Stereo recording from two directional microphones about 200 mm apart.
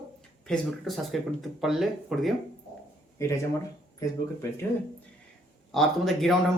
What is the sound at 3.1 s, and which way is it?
Speech, 15° left (ahead or behind).